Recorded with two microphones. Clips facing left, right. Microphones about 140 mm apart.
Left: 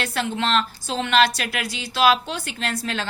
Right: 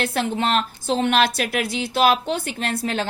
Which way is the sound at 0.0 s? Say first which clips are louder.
Right 2 dB; 50° right (ahead or behind).